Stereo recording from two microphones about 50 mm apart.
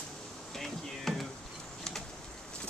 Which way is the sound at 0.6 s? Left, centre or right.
Centre.